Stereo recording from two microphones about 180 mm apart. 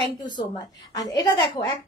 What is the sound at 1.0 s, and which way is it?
Speech, 25° left (ahead or behind).